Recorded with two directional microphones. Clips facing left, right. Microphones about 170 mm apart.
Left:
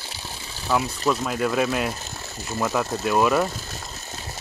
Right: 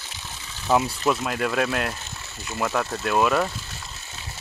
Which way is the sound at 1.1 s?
Centre (ahead or behind).